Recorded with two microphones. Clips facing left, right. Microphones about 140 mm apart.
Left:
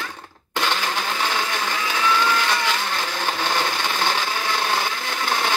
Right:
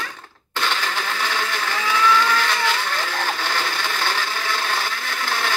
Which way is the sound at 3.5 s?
15° left (ahead or behind).